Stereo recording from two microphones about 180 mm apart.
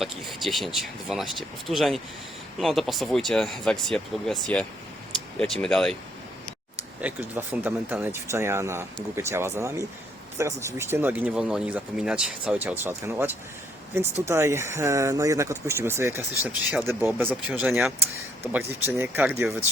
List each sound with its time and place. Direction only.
0.0 s speech: centre (ahead or behind)
7.0 s speech: 10° right (ahead or behind)